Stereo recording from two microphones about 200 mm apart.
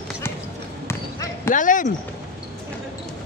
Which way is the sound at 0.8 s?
10° left (ahead or behind).